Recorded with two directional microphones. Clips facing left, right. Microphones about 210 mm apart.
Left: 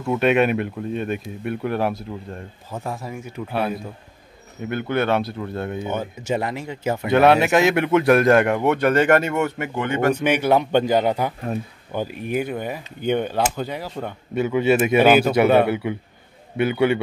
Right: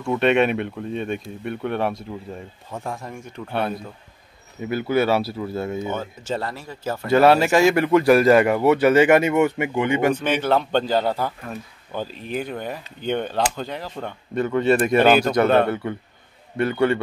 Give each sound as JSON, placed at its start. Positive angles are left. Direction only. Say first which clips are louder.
{"t": 0.0, "sound": "speech", "louder": "even", "side_deg": 0}
{"t": 5.8, "sound": "speech", "louder": "left 1 dB", "side_deg": 10}
{"t": 7.1, "sound": "speech", "louder": "even", "side_deg": 0}
{"t": 10.2, "sound": "speech", "louder": "left 2 dB", "side_deg": 10}